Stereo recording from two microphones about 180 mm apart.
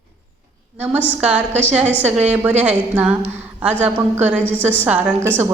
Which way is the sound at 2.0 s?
40° right (ahead or behind).